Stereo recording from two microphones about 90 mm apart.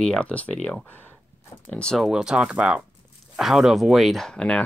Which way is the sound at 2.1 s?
5° right (ahead or behind).